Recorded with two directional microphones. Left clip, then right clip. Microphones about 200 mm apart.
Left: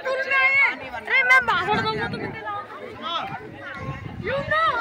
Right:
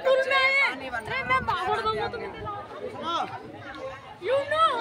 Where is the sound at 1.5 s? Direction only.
50° left (ahead or behind).